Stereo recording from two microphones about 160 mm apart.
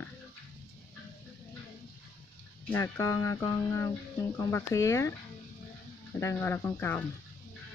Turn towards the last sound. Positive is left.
turn(degrees=10)  # may be behind; listen again after turning